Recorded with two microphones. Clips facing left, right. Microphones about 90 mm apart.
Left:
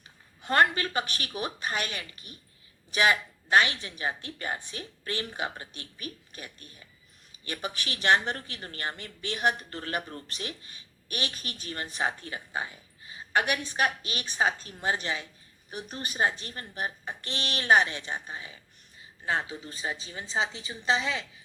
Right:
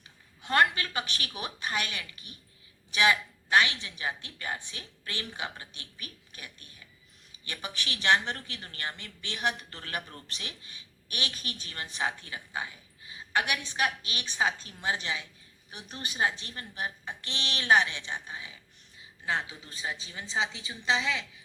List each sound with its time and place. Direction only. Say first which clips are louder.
0.0 s a woman's voice: left 3 dB; 40° left (ahead or behind)